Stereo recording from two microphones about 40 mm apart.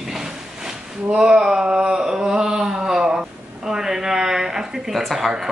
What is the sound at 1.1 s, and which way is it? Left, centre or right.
A woman's voice, right.